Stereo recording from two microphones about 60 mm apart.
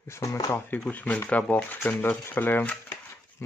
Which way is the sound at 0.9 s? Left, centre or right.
Left.